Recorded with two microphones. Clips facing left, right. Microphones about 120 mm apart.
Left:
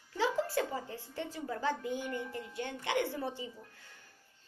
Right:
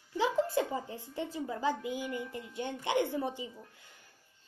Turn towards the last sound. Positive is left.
turn(degrees=-15)  # may be behind; listen again after turning